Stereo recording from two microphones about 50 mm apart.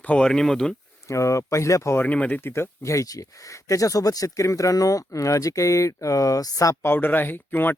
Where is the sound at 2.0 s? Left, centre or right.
Left.